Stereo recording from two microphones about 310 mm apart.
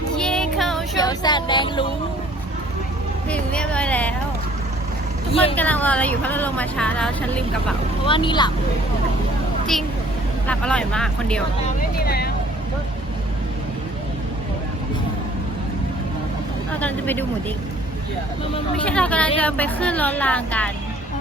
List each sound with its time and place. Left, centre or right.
0.2 s child singing: centre
0.9 s child singing: centre
3.2 s speech: centre
5.3 s speech: centre
5.5 s speech: centre
8.0 s speech: centre
10.4 s speech: centre
11.9 s vehicle: left
16.8 s speech: centre
18.8 s speech: centre